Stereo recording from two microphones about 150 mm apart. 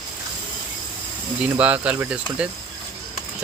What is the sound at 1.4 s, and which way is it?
Speech, 10° right (ahead or behind).